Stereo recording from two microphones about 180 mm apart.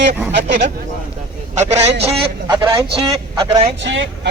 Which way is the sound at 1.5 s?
40° right (ahead or behind).